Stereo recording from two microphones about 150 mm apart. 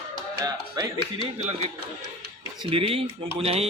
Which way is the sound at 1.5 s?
45° right (ahead or behind).